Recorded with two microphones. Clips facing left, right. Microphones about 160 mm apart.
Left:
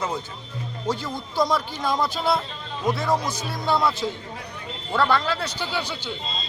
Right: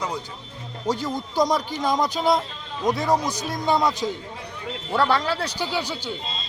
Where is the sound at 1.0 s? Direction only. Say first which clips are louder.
Right 3 dB; 15° right (ahead or behind).